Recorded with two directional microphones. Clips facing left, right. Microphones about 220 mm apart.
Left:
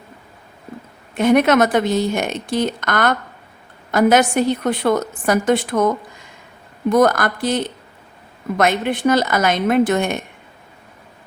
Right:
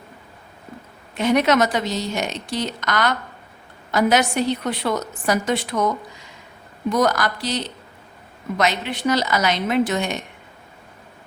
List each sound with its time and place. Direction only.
1.1 s a woman's voice: 50° left (ahead or behind)
6.9 s a woman's voice: 55° left (ahead or behind)